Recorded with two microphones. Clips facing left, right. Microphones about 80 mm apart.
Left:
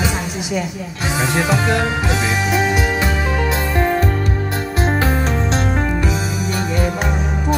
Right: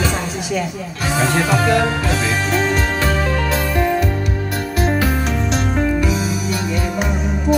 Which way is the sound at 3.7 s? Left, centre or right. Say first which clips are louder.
Left 2 dB; left.